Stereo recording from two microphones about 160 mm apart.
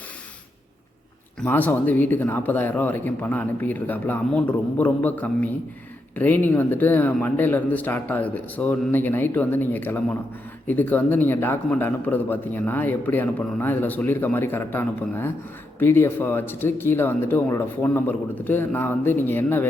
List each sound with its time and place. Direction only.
1.4 s a man's voice: 10° left (ahead or behind)